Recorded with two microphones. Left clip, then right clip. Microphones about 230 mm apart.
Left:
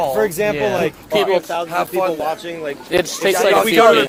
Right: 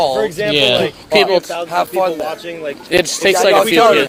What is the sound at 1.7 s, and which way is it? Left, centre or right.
Speech, right.